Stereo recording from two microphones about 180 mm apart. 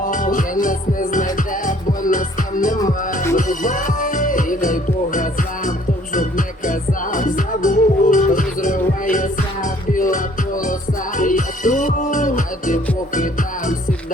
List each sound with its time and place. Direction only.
0.0 s music: 50° left (ahead or behind)
11.2 s music: 50° left (ahead or behind)